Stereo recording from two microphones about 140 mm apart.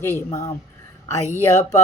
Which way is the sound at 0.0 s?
15° left (ahead or behind).